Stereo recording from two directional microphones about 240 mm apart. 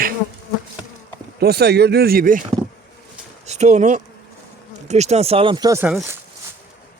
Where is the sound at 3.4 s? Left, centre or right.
Right; by 6.2 s centre.